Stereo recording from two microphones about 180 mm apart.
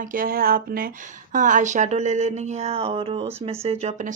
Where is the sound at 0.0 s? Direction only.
50° right (ahead or behind).